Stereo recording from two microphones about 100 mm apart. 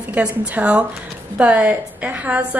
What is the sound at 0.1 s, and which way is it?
A woman's voice, 10° right (ahead or behind).